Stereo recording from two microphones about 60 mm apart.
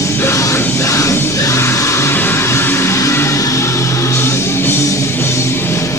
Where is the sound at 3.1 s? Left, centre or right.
Left.